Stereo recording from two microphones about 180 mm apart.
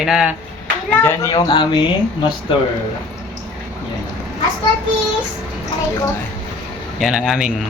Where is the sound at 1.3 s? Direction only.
25° left (ahead or behind).